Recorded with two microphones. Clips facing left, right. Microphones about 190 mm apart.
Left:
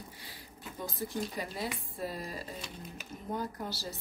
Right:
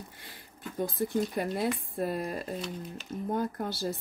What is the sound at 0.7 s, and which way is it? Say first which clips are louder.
A woman's voice: right 8 dB; 55° right (ahead or behind).